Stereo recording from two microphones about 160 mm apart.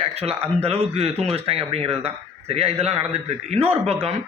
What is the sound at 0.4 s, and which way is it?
Speech, 40° right (ahead or behind).